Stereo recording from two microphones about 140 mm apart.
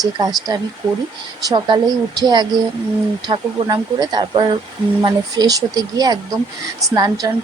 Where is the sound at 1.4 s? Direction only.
30° right (ahead or behind).